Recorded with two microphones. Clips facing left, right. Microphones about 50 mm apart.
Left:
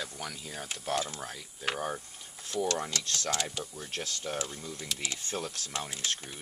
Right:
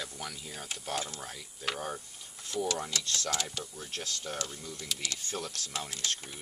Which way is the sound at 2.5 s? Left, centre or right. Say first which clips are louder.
Left 2 dB; centre.